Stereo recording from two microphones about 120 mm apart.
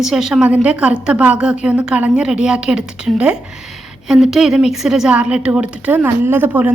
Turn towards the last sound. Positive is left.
turn(degrees=-15)  # may be behind; listen again after turning